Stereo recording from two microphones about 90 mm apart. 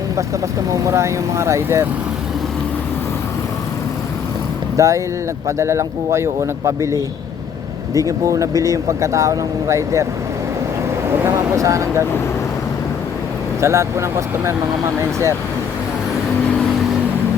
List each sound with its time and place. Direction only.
0.9 s speech: 30° right (ahead or behind)
4.8 s speech: 35° right (ahead or behind)
11.3 s speech: 35° right (ahead or behind)
13.6 s speech: 30° right (ahead or behind)